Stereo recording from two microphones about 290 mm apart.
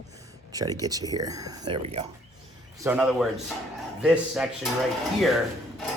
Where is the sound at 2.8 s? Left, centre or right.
Centre.